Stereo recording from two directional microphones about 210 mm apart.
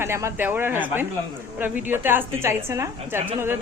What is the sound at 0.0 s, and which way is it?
A woman's voice, 10° right (ahead or behind).